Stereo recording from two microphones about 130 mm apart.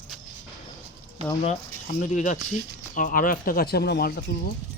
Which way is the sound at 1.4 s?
75° left (ahead or behind).